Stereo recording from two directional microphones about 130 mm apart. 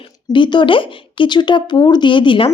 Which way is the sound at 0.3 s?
35° left (ahead or behind).